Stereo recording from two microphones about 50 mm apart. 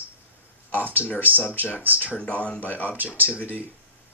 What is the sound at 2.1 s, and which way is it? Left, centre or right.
Speech, left.